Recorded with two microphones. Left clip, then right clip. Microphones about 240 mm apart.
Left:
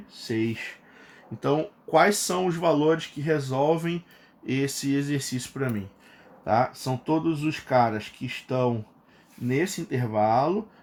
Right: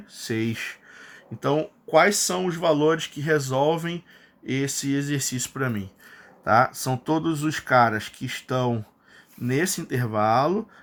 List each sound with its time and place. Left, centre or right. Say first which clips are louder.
0.3 s speech: right 1 dB; right
1.4 s speech: right 1 dB; centre